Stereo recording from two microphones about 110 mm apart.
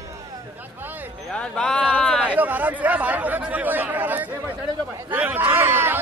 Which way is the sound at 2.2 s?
15° right (ahead or behind).